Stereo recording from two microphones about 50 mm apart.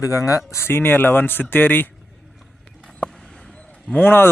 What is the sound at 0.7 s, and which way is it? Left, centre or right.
Speech, left.